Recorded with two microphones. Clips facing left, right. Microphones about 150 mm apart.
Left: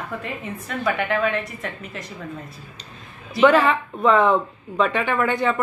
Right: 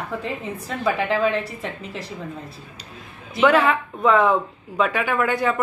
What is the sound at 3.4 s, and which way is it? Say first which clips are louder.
A woman's voice: left 1 dB; 5° right (ahead or behind).